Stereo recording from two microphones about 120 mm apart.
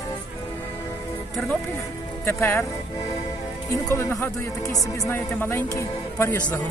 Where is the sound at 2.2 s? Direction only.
20° left (ahead or behind).